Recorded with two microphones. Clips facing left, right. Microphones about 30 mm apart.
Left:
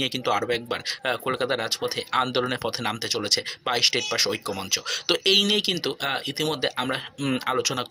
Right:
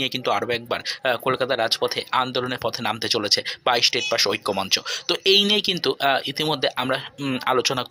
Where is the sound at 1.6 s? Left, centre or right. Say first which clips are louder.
Right 6 dB; right.